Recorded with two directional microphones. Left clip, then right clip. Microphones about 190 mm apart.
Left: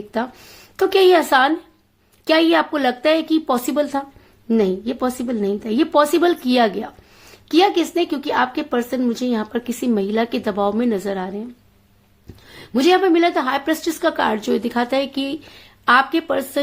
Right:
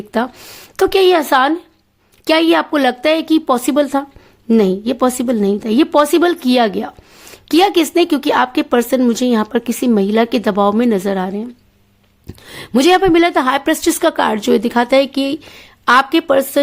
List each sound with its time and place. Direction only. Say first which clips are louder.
0.8 s speech: right 2 dB; 40° right (ahead or behind)
12.5 s speech: right 4 dB; 50° right (ahead or behind)